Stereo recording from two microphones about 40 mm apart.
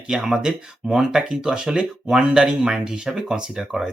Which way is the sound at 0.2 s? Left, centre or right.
Centre.